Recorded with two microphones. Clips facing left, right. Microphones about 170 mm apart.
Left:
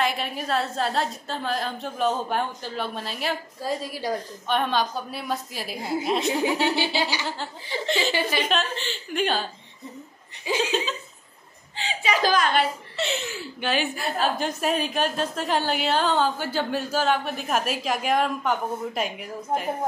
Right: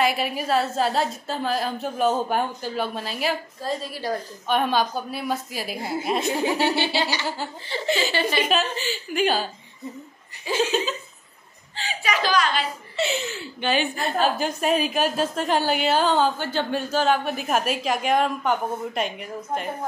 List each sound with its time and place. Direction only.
0.0 s a woman's voice: 5° right (ahead or behind)
3.6 s a woman's voice: 10° left (ahead or behind)
4.5 s a woman's voice: 5° right (ahead or behind)
7.0 s a woman's voice: 10° left (ahead or behind)
8.4 s a woman's voice: 5° right (ahead or behind)
10.5 s a woman's voice: 15° left (ahead or behind)
11.7 s a sound: 20° left (ahead or behind)
12.2 s a woman's voice: 45° left (ahead or behind)
12.9 s a woman's voice: centre (ahead or behind)